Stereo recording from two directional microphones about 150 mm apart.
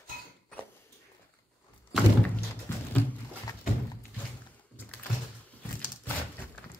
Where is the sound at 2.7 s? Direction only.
15° left (ahead or behind).